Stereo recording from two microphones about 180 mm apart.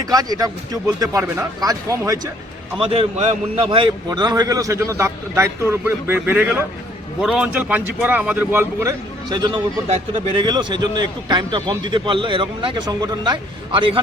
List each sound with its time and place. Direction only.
0.0 s a man's voice: 20° right (ahead or behind)
2.7 s a man's voice: 30° right (ahead or behind)